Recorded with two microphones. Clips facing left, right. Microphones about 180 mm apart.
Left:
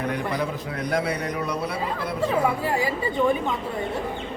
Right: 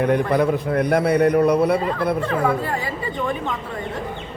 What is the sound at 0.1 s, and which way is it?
A man's voice, 55° right (ahead or behind).